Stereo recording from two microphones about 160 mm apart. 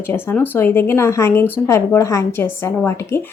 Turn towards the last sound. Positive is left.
turn(degrees=15)  # may be behind; listen again after turning